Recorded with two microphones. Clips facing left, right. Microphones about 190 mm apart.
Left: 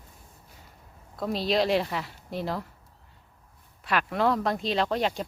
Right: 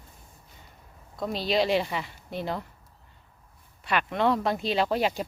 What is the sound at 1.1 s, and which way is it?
Speech, centre (ahead or behind).